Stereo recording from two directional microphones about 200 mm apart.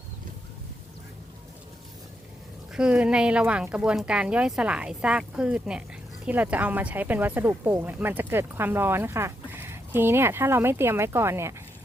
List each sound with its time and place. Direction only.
2.7 s speech: 5° right (ahead or behind)